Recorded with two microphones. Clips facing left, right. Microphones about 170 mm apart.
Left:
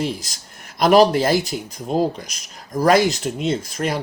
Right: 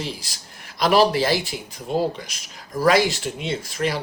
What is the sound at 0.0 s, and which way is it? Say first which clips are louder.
Speech: left 6 dB; 45° left (ahead or behind).